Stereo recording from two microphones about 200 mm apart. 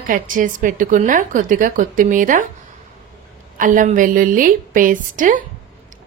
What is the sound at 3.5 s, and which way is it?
A woman's voice, 40° right (ahead or behind).